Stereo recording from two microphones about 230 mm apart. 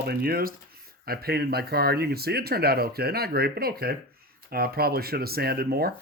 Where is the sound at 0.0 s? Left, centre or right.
Right.